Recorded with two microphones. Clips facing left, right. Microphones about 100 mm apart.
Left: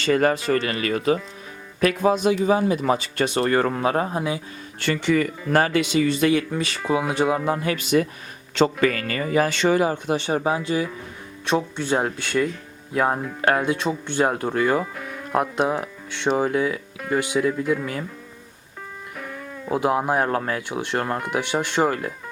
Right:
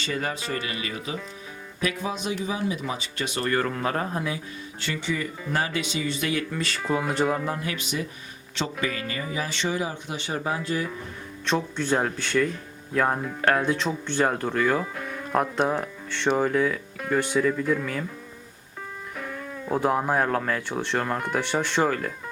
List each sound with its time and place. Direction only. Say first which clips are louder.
0.0 s speech: left 10 dB; 55° left (ahead or behind)
3.3 s speech: left 4 dB; 35° left (ahead or behind)
3.8 s speech: left 5 dB; 20° left (ahead or behind)
4.8 s speech: left 9 dB; 65° left (ahead or behind)
6.2 s speech: left 8 dB; 30° left (ahead or behind)
6.7 s speech: left 3 dB; 5° left (ahead or behind)
7.6 s speech: left 9 dB; 55° left (ahead or behind)
10.2 s speech: left 2 dB; 25° left (ahead or behind); by 18.0 s 5° left (ahead or behind)
19.1 s speech: even; centre (ahead or behind)